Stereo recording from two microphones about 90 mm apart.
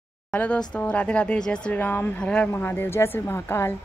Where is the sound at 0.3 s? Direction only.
15° left (ahead or behind).